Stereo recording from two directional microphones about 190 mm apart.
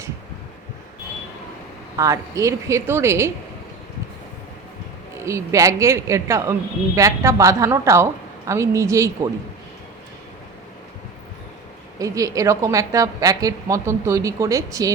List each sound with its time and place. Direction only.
2.0 s a woman's voice: 15° right (ahead or behind)
5.2 s a woman's voice: 15° right (ahead or behind)
11.9 s a woman's voice: 15° right (ahead or behind)